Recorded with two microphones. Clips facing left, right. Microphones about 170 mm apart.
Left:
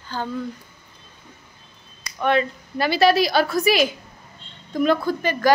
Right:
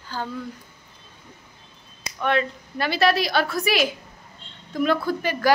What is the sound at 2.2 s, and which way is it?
A woman's voice, centre (ahead or behind).